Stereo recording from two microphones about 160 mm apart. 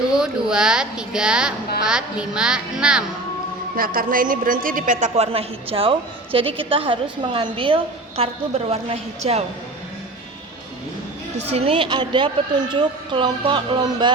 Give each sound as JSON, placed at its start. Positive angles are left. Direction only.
{"t": 0.1, "sound": "a child's voice", "side_deg": -5}
{"t": 3.8, "sound": "a woman's voice", "side_deg": -65}
{"t": 11.4, "sound": "a woman's voice", "side_deg": -40}